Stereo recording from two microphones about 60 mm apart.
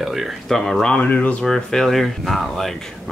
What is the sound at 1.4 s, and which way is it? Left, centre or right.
Speech, centre.